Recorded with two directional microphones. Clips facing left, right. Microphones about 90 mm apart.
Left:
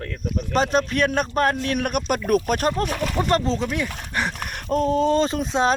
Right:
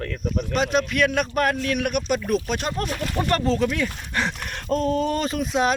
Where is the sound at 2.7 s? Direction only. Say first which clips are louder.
Left 2 dB; 25° left (ahead or behind).